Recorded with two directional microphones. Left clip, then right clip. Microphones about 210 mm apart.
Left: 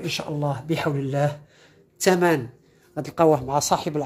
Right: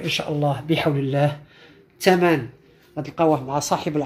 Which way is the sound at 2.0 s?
15° left (ahead or behind).